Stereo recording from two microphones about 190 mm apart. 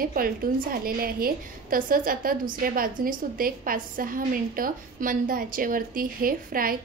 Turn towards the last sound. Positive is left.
turn(degrees=-50)  # may be behind; listen again after turning